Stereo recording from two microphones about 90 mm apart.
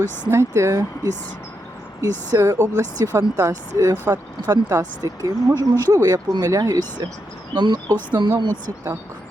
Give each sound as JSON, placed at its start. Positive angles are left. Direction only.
{"t": 0.3, "sound": "speech", "side_deg": -35}
{"t": 4.1, "sound": "speech", "side_deg": -45}
{"t": 7.5, "sound": "speech", "side_deg": -55}